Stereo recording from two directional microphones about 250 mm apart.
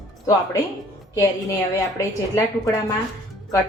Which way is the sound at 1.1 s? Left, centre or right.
Centre.